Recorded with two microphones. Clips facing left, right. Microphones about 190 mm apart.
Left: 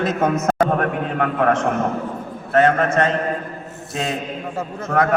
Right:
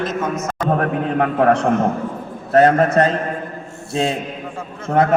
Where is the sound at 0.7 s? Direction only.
35° right (ahead or behind).